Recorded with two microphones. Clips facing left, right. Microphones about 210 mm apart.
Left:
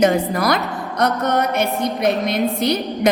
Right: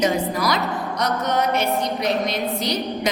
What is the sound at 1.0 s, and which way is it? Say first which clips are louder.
Music: left 4 dB; 55° left (ahead or behind).